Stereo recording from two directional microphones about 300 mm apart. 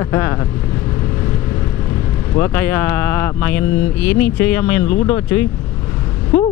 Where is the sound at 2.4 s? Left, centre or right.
Centre.